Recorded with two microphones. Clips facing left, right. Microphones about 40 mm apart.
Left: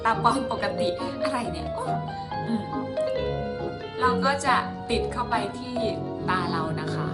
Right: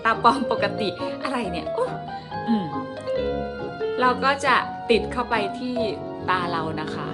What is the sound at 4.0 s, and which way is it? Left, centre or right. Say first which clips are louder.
Speech: right 2 dB; right.